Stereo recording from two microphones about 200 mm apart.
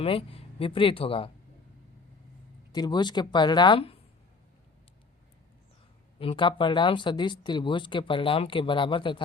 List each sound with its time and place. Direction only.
0.0 s speech: 30° left (ahead or behind)
2.7 s speech: 20° left (ahead or behind)
6.1 s speech: 25° left (ahead or behind)